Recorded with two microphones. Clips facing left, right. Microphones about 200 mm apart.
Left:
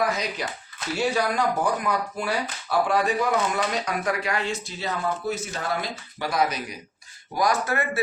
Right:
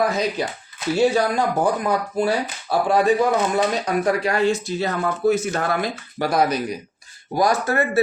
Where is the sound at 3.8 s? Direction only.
35° right (ahead or behind).